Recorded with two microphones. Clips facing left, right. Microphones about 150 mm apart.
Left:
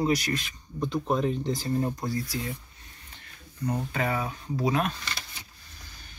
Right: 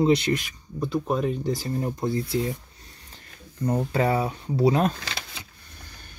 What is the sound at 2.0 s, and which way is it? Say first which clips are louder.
Speech: right 5 dB; 25° right (ahead or behind).